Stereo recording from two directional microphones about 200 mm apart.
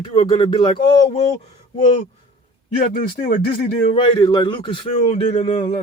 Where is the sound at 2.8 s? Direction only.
50° left (ahead or behind).